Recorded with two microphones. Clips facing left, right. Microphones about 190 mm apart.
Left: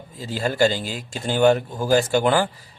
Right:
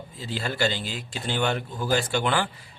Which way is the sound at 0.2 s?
45° left (ahead or behind).